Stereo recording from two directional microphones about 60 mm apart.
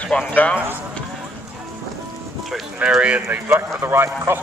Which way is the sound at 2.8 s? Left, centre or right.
Right.